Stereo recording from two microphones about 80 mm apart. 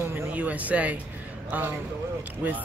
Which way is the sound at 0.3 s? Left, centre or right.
Centre.